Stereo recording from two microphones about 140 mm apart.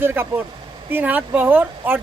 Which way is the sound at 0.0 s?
15° right (ahead or behind).